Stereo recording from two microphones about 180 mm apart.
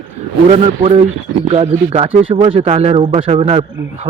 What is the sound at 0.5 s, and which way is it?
A man's voice, 35° right (ahead or behind).